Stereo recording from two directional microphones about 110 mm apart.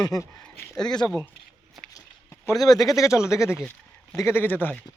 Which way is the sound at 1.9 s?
30° left (ahead or behind).